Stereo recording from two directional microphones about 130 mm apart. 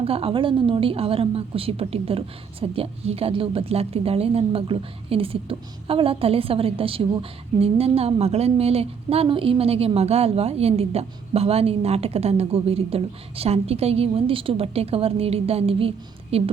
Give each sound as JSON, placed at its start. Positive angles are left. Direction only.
{"t": 0.0, "sound": "speech", "side_deg": -45}